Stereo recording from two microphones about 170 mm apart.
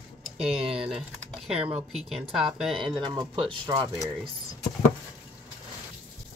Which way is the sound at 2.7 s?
30° right (ahead or behind).